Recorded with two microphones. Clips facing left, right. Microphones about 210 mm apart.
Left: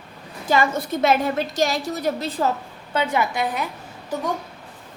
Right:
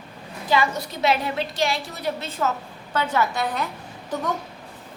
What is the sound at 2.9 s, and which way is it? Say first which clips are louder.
Speech: left 1 dB; 15° left (ahead or behind).